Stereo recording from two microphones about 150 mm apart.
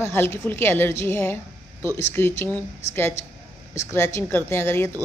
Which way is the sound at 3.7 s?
20° left (ahead or behind).